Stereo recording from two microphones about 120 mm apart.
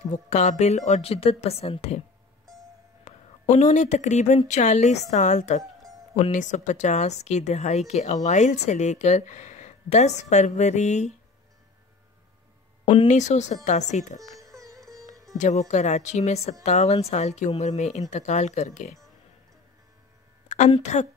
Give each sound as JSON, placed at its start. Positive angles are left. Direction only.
{"t": 0.1, "sound": "speech", "side_deg": 70}
{"t": 3.1, "sound": "speech", "side_deg": 75}
{"t": 6.1, "sound": "speech", "side_deg": 90}
{"t": 12.8, "sound": "speech", "side_deg": 70}
{"t": 14.2, "sound": "music", "side_deg": -30}
{"t": 14.9, "sound": "sitar", "side_deg": -30}
{"t": 15.3, "sound": "speech", "side_deg": 75}
{"t": 20.4, "sound": "a woman's voice", "side_deg": 75}